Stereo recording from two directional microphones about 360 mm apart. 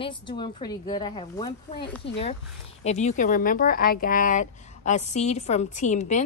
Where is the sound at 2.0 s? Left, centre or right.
Left.